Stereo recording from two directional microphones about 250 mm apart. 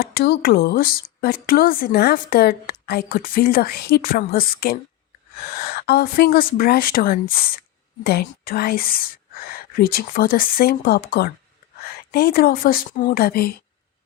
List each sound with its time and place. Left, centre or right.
0.0 s a woman's voice: left